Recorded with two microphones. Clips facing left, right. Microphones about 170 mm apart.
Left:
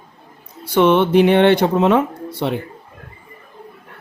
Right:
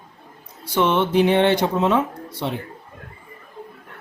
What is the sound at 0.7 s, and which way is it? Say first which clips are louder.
Speech: left 5 dB; 60° left (ahead or behind).